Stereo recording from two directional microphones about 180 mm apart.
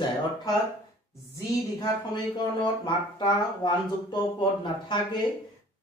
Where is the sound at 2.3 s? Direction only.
25° left (ahead or behind).